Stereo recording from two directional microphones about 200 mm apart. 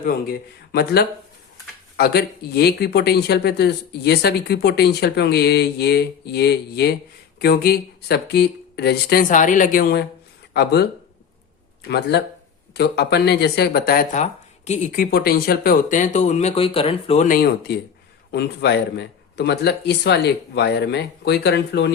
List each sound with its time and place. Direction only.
0.0 s speech: 50° left (ahead or behind)
11.9 s speech: 55° left (ahead or behind); by 17.2 s 30° left (ahead or behind)
17.2 s speech: 50° left (ahead or behind)